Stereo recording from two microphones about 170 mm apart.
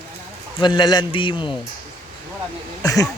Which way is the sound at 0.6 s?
25° left (ahead or behind).